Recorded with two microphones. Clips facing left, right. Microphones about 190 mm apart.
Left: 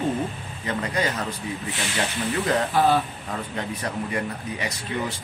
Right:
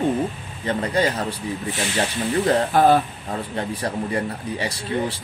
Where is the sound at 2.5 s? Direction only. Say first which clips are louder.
Right 4 dB; 45° right (ahead or behind).